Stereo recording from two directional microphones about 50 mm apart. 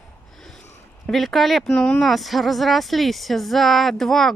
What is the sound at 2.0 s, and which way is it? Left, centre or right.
Speech, centre.